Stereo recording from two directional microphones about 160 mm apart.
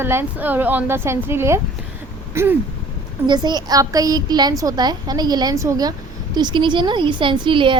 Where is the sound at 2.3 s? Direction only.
15° right (ahead or behind).